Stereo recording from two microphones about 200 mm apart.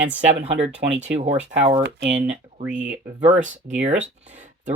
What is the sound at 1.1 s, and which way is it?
Speech, 35° right (ahead or behind).